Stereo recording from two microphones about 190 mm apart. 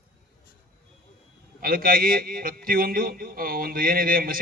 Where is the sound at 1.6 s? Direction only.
50° right (ahead or behind).